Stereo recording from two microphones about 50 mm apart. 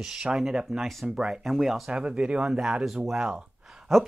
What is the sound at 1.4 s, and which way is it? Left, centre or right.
Speech, centre.